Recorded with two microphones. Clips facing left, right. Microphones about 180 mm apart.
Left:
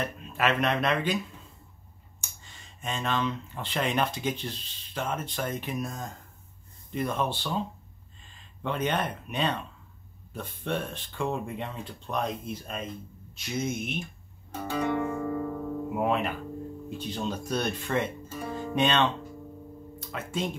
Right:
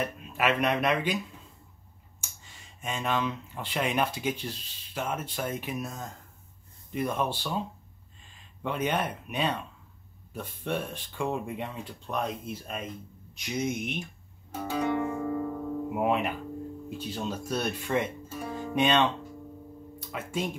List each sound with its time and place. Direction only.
0.0 s speech: 10° right (ahead or behind)
14.5 s guitar: 5° right (ahead or behind)
17.0 s speech: 5° right (ahead or behind)